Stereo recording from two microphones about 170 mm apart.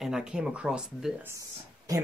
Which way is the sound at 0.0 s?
5° right (ahead or behind).